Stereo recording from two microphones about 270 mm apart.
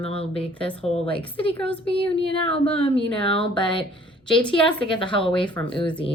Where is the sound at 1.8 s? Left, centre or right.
Centre.